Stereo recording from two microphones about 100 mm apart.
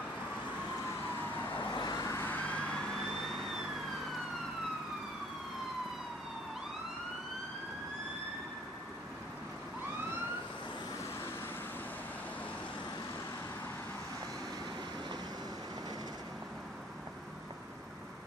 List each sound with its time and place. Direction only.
1.6 s vehicle: 45° left (ahead or behind)
2.1 s emergency vehicle: 20° left (ahead or behind)